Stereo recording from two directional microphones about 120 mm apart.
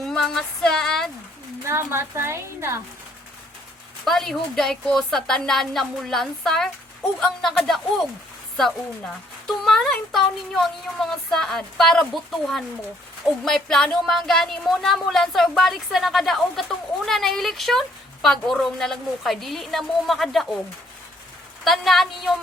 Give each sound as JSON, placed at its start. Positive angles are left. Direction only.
{"t": 0.0, "sound": "a sound", "side_deg": 5}
{"t": 1.6, "sound": "a woman's voice", "side_deg": -20}
{"t": 4.0, "sound": "a woman's voice", "side_deg": 0}
{"t": 9.5, "sound": "a woman's voice", "side_deg": 5}
{"t": 21.6, "sound": "a woman's voice", "side_deg": 0}